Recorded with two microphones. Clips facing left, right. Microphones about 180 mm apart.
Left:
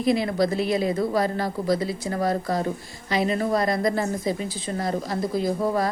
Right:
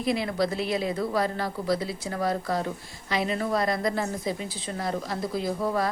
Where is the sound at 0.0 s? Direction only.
Centre (ahead or behind).